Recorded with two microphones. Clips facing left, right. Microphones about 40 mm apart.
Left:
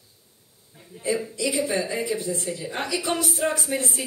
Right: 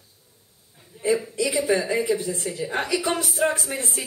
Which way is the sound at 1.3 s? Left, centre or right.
Right.